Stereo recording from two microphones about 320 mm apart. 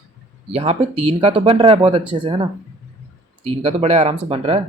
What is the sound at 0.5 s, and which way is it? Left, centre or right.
Speech, centre.